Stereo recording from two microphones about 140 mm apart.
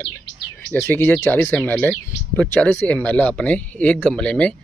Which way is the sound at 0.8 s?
15° left (ahead or behind).